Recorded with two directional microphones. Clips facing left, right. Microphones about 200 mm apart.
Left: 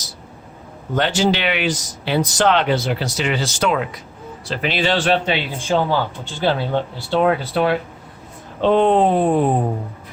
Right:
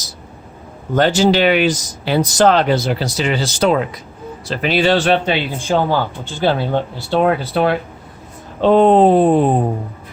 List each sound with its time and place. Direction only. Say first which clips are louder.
0.9 s speech: right 5 dB; 40° right (ahead or behind)
7.1 s speech: right 2 dB; 40° right (ahead or behind)